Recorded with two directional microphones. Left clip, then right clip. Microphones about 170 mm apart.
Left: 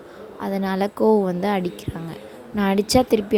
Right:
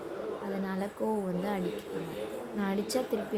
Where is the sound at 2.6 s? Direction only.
55° left (ahead or behind).